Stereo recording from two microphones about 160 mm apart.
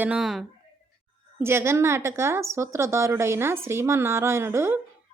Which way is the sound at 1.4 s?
15° right (ahead or behind).